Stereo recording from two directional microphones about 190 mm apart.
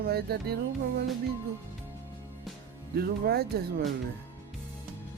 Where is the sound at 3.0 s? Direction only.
55° right (ahead or behind).